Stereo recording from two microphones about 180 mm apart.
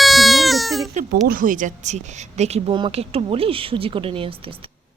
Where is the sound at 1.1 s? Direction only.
50° right (ahead or behind); by 4.7 s 30° right (ahead or behind).